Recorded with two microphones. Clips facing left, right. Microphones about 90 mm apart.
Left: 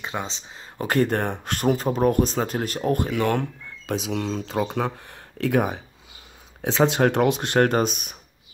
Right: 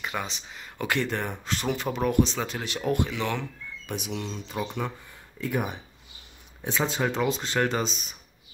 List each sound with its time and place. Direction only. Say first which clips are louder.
0.0 s speech: left 2 dB; 25° left (ahead or behind)
0.8 s speech: left 6 dB; 45° left (ahead or behind)
3.9 s speech: left 7 dB; 90° left
4.5 s speech: left 5 dB; 80° left
5.4 s speech: left 7 dB; 90° left
6.6 s speech: left 8 dB; 80° left; by 8.2 s 60° left (ahead or behind)